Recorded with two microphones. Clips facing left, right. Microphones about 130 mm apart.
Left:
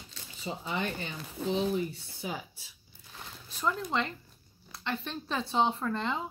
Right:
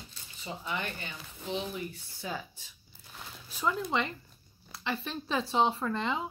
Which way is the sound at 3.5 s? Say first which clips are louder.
Right 1 dB; centre (ahead or behind).